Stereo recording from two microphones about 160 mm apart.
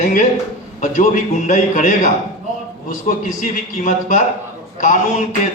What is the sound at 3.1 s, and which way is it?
A man's voice, 55° left (ahead or behind).